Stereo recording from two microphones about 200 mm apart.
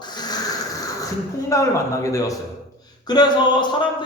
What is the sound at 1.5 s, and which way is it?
Speech, 15° left (ahead or behind).